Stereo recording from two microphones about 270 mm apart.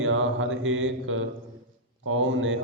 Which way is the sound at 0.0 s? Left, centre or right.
Right.